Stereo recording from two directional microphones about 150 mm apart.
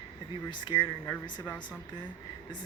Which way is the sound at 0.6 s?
30° left (ahead or behind).